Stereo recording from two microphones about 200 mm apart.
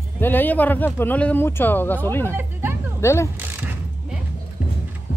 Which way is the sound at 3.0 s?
15° left (ahead or behind).